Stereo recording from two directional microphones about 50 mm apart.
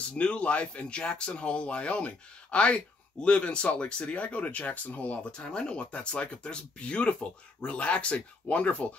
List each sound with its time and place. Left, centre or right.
0.1 s speech: left